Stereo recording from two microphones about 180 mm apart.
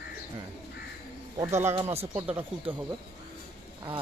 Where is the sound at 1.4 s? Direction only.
15° right (ahead or behind).